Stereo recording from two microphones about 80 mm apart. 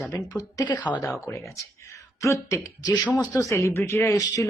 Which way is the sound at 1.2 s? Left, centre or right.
Left.